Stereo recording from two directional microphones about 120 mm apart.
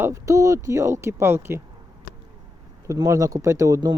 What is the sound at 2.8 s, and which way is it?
Speech, 30° right (ahead or behind).